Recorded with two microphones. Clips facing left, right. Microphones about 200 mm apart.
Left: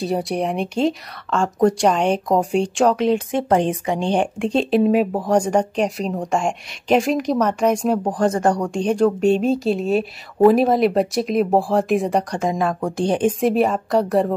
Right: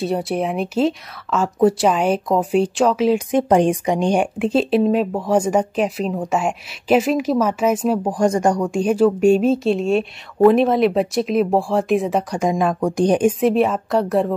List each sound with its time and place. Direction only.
0.0 s speech: centre (ahead or behind)
3.3 s speech: 15° right (ahead or behind); by 12.4 s centre (ahead or behind)
12.4 s speech: 15° right (ahead or behind)
13.4 s speech: centre (ahead or behind)